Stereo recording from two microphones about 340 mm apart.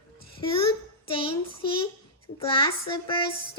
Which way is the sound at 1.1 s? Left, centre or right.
Centre.